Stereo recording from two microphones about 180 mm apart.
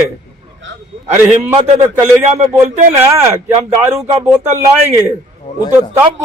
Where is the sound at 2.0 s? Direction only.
40° right (ahead or behind).